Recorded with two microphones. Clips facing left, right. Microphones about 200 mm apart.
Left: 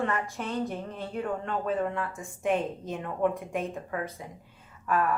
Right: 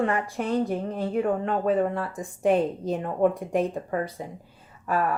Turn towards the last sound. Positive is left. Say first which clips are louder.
# right 2 dB
turn(degrees=-35)  # may be behind; listen again after turning